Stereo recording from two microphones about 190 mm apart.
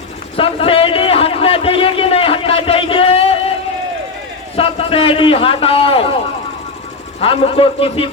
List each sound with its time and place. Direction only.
0.3 s a sound: 30° left (ahead or behind)
4.5 s a man's voice: 30° left (ahead or behind)
7.2 s a man's voice: 30° left (ahead or behind)